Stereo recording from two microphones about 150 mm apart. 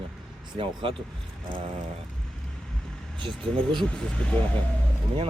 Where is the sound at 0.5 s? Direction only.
35° right (ahead or behind).